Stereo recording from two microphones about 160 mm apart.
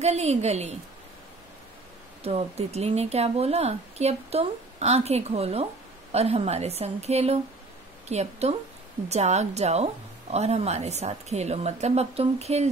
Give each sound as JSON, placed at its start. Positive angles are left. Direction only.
{"t": 0.0, "sound": "a woman's voice", "side_deg": -40}
{"t": 2.2, "sound": "a woman's voice", "side_deg": -40}